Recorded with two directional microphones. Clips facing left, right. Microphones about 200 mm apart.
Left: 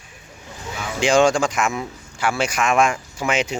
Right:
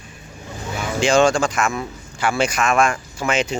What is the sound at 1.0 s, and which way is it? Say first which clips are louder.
Speech: even; 15° left (ahead or behind).